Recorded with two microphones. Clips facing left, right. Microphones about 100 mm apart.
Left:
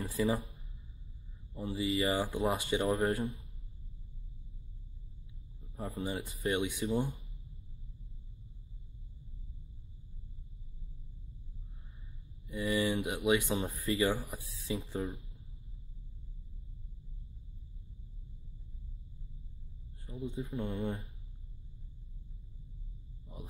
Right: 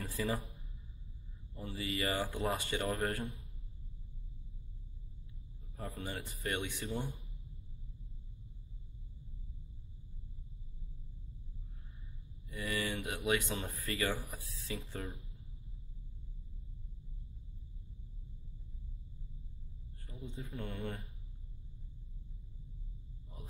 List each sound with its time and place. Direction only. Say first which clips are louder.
0.0 s speech: left 5 dB; 5° left (ahead or behind)
1.8 s speech: left 5 dB; 15° left (ahead or behind)
5.8 s speech: left 5 dB; 5° left (ahead or behind)
6.9 s speech: left 7 dB; centre (ahead or behind)
12.4 s speech: left 6 dB; 20° left (ahead or behind)
14.9 s speech: left 7 dB; 5° left (ahead or behind)
20.1 s speech: left 8 dB; 5° left (ahead or behind)